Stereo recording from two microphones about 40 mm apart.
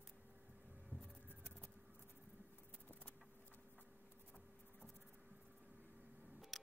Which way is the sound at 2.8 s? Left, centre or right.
Left.